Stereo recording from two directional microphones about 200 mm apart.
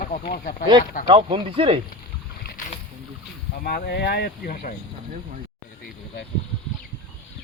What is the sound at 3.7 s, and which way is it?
Speech, 50° left (ahead or behind).